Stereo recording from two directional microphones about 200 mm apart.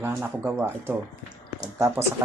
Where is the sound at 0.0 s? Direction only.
10° right (ahead or behind).